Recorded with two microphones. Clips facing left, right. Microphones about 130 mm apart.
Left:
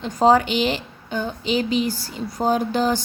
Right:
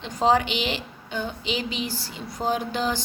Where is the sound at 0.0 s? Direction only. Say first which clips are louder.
Left 5 dB; 45° left (ahead or behind).